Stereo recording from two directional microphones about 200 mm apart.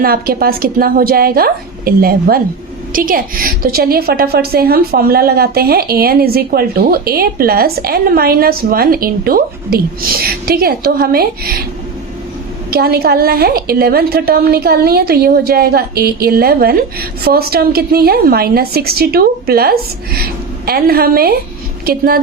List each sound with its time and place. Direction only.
0.0 s a woman's voice: 50° right (ahead or behind)
12.7 s a woman's voice: 50° right (ahead or behind)